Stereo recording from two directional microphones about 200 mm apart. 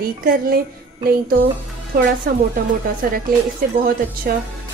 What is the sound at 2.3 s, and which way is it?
Speech, 45° right (ahead or behind).